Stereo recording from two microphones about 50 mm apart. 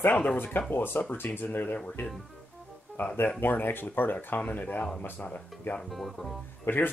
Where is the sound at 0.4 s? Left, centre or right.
Left.